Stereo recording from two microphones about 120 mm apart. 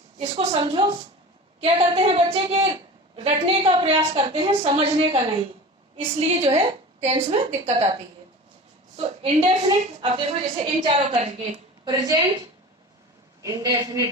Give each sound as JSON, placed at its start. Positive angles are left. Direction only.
{"t": 0.2, "sound": "a woman's voice", "side_deg": -50}
{"t": 1.6, "sound": "a woman's voice", "side_deg": -60}
{"t": 5.0, "sound": "a woman's voice", "side_deg": -50}
{"t": 9.0, "sound": "a woman's voice", "side_deg": -55}
{"t": 11.9, "sound": "a woman's voice", "side_deg": -30}
{"t": 13.4, "sound": "a woman's voice", "side_deg": -30}